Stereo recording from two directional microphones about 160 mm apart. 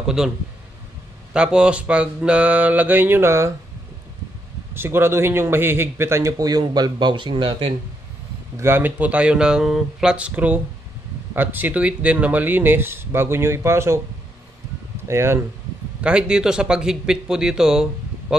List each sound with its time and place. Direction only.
0.0 s speech: 5° right (ahead or behind)
1.3 s a man's voice: 5° right (ahead or behind)
4.7 s a man's voice: 15° right (ahead or behind); by 7.7 s 30° right (ahead or behind)
8.5 s a man's voice: 15° right (ahead or behind)
15.0 s a man's voice: 15° right (ahead or behind)